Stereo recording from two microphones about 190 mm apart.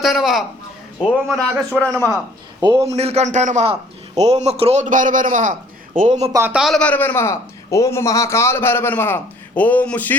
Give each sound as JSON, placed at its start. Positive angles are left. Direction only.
{"t": 0.0, "sound": "a man's voice", "side_deg": 0}
{"t": 2.6, "sound": "a man's voice", "side_deg": -25}
{"t": 6.3, "sound": "a man's voice", "side_deg": -10}